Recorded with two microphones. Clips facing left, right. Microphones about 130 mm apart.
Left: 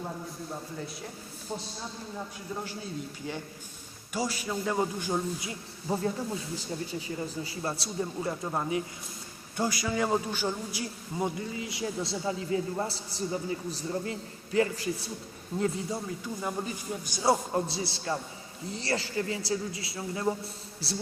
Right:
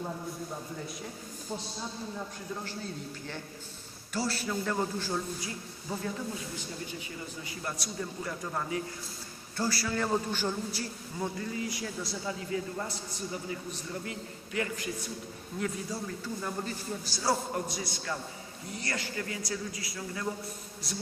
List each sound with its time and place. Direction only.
4.1 s a man's voice: 10° left (ahead or behind)
5.9 s a man's voice: 30° left (ahead or behind)
7.2 s a man's voice: 30° left (ahead or behind)